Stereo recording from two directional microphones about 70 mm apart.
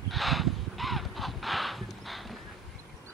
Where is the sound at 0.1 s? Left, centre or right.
Centre.